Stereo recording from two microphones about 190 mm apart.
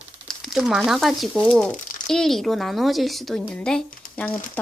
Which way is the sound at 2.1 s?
Centre (ahead or behind).